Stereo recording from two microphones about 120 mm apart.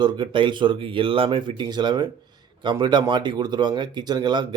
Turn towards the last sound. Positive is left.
turn(degrees=-40)  # may be behind; listen again after turning